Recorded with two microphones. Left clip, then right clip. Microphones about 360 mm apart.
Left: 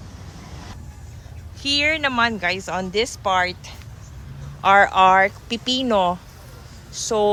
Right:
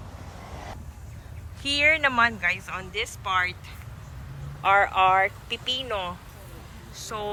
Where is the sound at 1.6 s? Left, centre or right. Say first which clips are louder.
Left 1 dB; centre.